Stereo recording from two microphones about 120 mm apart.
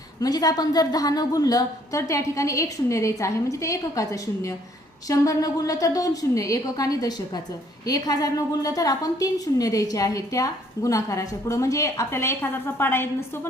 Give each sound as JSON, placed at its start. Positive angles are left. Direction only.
{"t": 0.2, "sound": "a woman's voice", "side_deg": 30}